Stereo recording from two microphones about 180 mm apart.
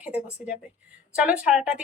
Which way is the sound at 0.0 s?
10° right (ahead or behind).